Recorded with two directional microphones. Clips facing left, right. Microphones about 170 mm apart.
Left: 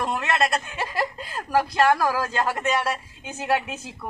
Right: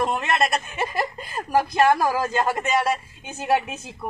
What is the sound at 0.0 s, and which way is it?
Speech, 15° right (ahead or behind).